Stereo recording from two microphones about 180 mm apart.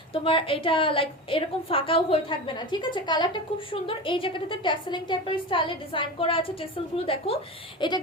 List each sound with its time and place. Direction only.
0.1 s a woman's voice: 30° left (ahead or behind)